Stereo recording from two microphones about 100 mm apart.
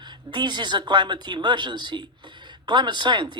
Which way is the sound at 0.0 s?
50° right (ahead or behind).